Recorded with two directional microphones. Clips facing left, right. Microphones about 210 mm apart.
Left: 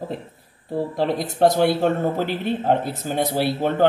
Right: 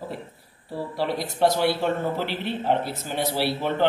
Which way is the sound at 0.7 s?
50° left (ahead or behind).